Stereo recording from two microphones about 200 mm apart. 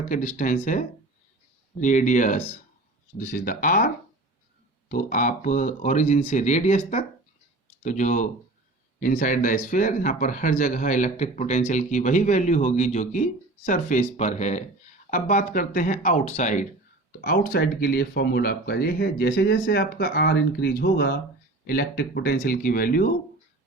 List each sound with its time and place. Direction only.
0.1 s speech: 40° left (ahead or behind)